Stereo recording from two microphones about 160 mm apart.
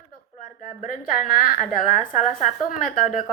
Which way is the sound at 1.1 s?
60° left (ahead or behind).